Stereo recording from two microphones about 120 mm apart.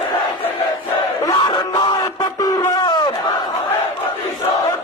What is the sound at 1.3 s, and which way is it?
Battle cry, 40° left (ahead or behind).